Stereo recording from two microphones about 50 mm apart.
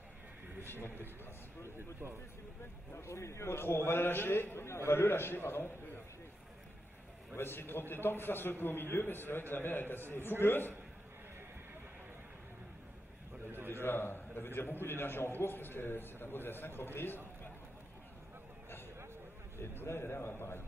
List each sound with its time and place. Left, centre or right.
0.6 s a man's voice: left
2.9 s a man's voice: left
7.3 s a man's voice: left
13.7 s a man's voice: left
19.8 s a man's voice: left